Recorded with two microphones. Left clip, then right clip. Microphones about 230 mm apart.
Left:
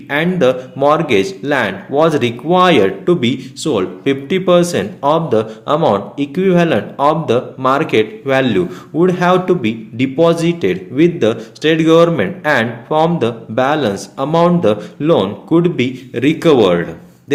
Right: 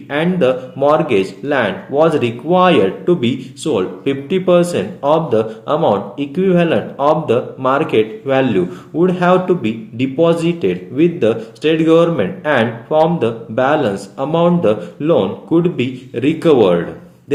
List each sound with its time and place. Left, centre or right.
0.1 s a man's voice: left